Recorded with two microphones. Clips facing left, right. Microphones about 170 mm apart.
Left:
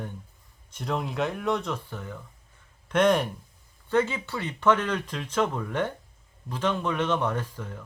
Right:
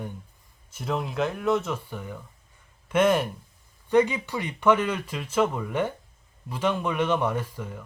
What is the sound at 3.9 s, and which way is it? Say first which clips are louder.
Speech: right 4 dB; 15° right (ahead or behind).